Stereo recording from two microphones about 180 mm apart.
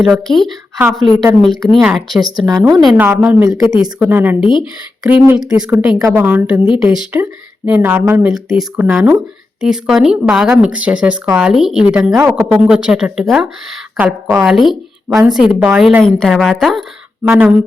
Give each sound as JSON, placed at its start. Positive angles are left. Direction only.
{"t": 0.0, "sound": "speech", "side_deg": 0}
{"t": 2.5, "sound": "speech", "side_deg": -20}